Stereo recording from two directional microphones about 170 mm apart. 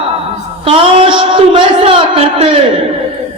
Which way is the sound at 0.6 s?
30° right (ahead or behind).